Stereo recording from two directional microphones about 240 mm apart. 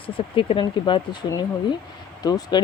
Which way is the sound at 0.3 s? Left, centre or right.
Left.